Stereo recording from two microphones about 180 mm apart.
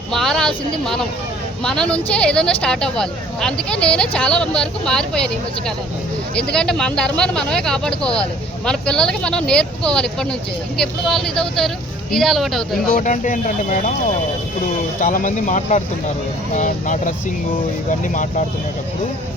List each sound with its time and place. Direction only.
0.1 s a sound: centre (ahead or behind)
1.6 s speech: 5° left (ahead or behind)
12.9 s speech: 45° left (ahead or behind)
15.0 s speech: 45° left (ahead or behind)